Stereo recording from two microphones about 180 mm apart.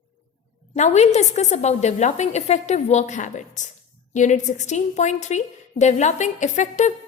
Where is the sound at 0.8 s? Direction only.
40° left (ahead or behind).